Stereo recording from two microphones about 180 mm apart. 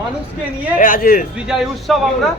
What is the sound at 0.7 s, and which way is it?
Speech, 50° left (ahead or behind).